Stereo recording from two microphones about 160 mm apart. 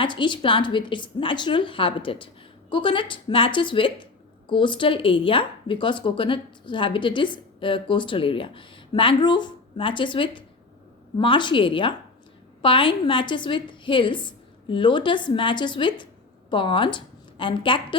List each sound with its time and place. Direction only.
0.0 s a woman's voice: 30° left (ahead or behind)